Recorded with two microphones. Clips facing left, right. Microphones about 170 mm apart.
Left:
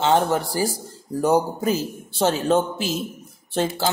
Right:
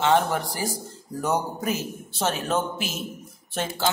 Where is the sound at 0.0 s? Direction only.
30° left (ahead or behind).